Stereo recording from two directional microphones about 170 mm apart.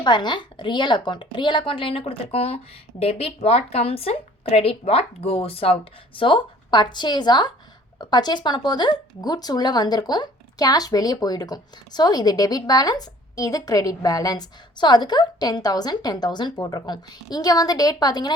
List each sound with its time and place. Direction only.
0.0 s a woman's voice: 25° left (ahead or behind)